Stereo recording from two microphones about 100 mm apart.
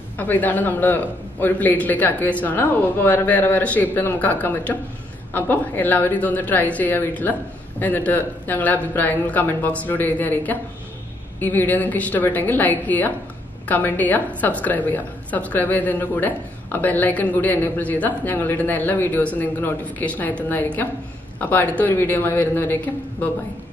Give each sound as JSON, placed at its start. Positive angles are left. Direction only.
{"t": 0.2, "sound": "a woman's voice", "side_deg": 15}